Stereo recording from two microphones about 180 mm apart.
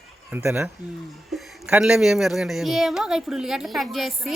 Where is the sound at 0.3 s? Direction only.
10° right (ahead or behind).